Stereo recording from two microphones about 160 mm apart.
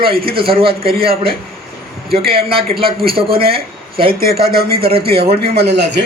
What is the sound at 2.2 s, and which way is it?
Speech, 75° right (ahead or behind).